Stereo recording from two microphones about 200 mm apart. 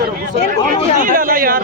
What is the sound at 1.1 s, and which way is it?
Speech, 45° right (ahead or behind).